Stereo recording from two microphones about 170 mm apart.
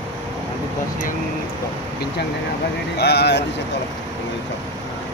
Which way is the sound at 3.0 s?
75° left (ahead or behind).